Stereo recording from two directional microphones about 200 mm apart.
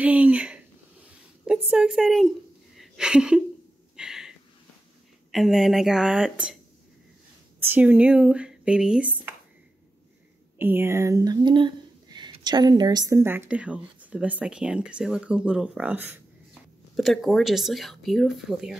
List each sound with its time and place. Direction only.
0.0 s a woman's voice: 5° right (ahead or behind)
3.9 s a sound: 5° right (ahead or behind)
5.3 s speech: centre (ahead or behind)
7.6 s speech: 10° right (ahead or behind)
10.6 s speech: 10° right (ahead or behind)